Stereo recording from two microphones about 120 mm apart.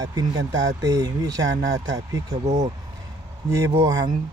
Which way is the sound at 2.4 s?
75° right (ahead or behind).